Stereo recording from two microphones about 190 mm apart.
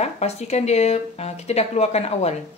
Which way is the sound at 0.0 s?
35° left (ahead or behind).